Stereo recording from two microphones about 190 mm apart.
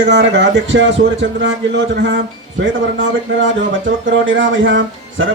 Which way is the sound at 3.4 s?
80° right.